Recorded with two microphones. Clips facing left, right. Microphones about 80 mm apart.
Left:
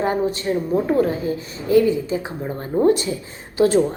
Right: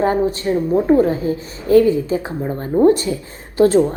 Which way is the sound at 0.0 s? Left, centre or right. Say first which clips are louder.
Right 4 dB; right.